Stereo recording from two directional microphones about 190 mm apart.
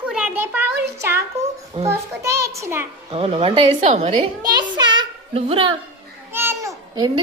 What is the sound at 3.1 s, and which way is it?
Speech, 30° right (ahead or behind).